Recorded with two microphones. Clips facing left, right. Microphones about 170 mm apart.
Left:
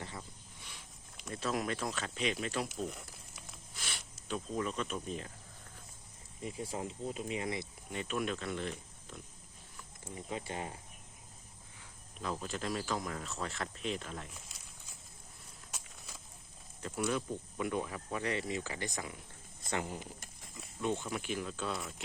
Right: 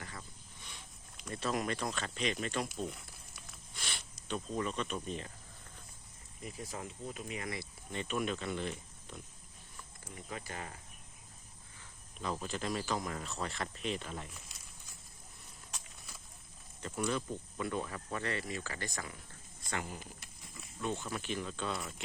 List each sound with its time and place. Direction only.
0.2 s cricket: 10° left (ahead or behind)
1.2 s speech: centre (ahead or behind)
3.8 s speech: centre (ahead or behind)
6.4 s speech: 25° left (ahead or behind)
7.9 s speech: 5° left (ahead or behind)
10.0 s speech: 25° left (ahead or behind)
12.2 s speech: centre (ahead or behind)
16.8 s speech: 5° left (ahead or behind); by 20.1 s 25° left (ahead or behind)
20.1 s a sound: 45° left (ahead or behind)
20.8 s speech: 15° left (ahead or behind); by 22.0 s centre (ahead or behind)